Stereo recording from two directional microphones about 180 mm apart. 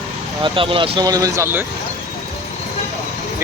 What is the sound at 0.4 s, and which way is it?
Speech, 30° right (ahead or behind).